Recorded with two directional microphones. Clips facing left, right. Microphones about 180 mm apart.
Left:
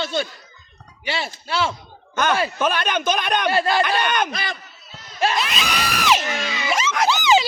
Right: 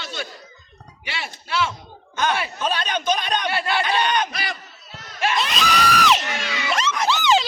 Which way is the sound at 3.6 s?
40° left (ahead or behind).